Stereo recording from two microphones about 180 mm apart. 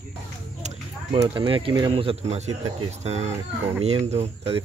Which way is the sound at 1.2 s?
25° right (ahead or behind).